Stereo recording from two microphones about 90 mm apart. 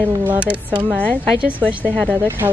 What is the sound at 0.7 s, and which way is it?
Speech, 15° right (ahead or behind).